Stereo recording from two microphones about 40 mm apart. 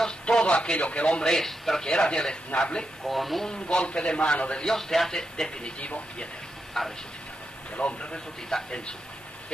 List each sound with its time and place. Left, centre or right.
0.2 s radio: left
0.5 s speech: left
1.2 s speech: centre
1.8 s a man's voice: left
3.1 s speech: centre
3.4 s a man's voice: centre
4.6 s speech: centre
5.6 s a man's voice: left
6.8 s speech: centre
7.7 s a man's voice: left
8.5 s speech: centre